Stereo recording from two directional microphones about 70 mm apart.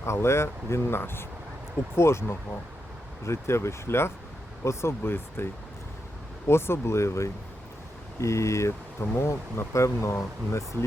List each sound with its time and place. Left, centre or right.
0.0 s speech: left
6.5 s speech: left